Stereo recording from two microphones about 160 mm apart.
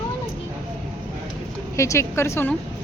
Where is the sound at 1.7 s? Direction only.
20° left (ahead or behind).